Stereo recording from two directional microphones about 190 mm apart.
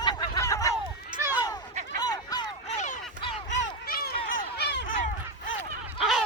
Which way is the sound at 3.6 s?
55° left (ahead or behind).